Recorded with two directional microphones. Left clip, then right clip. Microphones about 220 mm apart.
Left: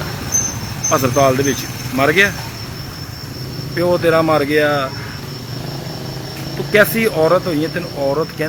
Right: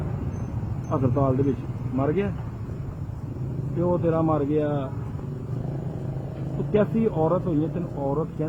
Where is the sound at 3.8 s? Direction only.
40° left (ahead or behind).